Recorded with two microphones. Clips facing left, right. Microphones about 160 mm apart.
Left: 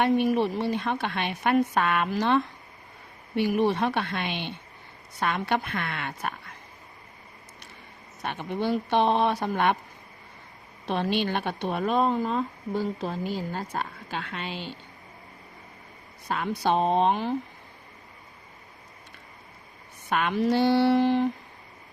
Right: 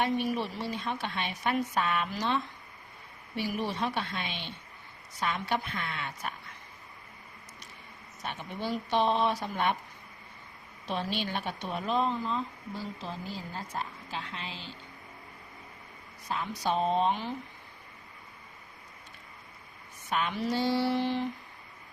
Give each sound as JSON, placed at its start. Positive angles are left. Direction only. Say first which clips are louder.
{"t": 0.0, "sound": "speech", "louder": "left 7 dB", "side_deg": 55}
{"t": 8.2, "sound": "speech", "louder": "left 7 dB", "side_deg": 60}
{"t": 10.8, "sound": "speech", "louder": "left 7 dB", "side_deg": 60}
{"t": 16.3, "sound": "speech", "louder": "left 5 dB", "side_deg": 65}
{"t": 20.1, "sound": "speech", "louder": "left 6 dB", "side_deg": 60}